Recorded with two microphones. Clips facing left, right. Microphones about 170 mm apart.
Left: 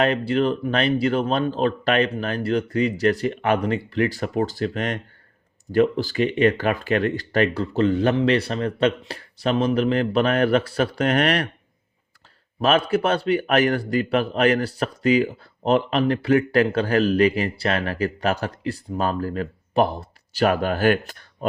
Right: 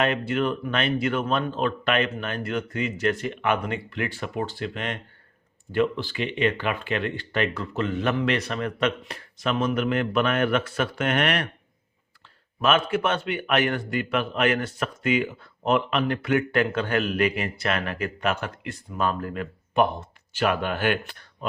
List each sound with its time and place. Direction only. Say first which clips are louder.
0.0 s a man's voice: left 4 dB; 35° left (ahead or behind)
12.5 s a man's voice: left 3 dB; 35° left (ahead or behind)